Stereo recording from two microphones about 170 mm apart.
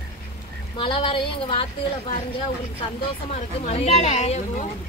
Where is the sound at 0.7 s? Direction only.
30° left (ahead or behind).